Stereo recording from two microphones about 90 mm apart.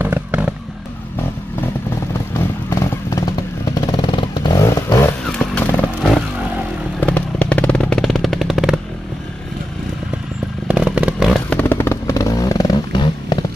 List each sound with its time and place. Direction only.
0.0 s fireworks: 20° right (ahead or behind)
2.7 s vehicle: 35° left (ahead or behind)
3.8 s vehicle: 60° left (ahead or behind)
4.6 s vehicle: 35° left (ahead or behind)
5.2 s motorcycle: 5° left (ahead or behind)
5.6 s vehicle: 15° left (ahead or behind)
8.0 s a sound: centre (ahead or behind)
10.7 s motorcycle: 15° right (ahead or behind)
11.6 s vehicle: 25° left (ahead or behind); by 13.0 s 45° left (ahead or behind)
13.0 s a sound: 60° left (ahead or behind)